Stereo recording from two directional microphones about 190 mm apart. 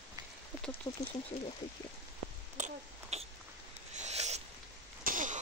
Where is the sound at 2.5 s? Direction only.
40° right (ahead or behind).